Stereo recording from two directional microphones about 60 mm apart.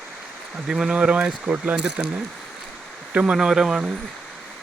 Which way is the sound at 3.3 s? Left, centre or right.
Centre.